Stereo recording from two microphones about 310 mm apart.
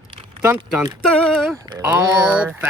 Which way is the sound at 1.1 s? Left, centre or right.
Centre.